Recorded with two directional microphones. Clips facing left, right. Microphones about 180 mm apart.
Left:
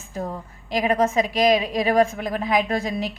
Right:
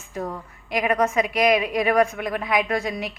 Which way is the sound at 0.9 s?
30° left (ahead or behind).